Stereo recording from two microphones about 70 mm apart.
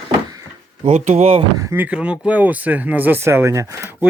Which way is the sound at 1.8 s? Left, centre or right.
Centre.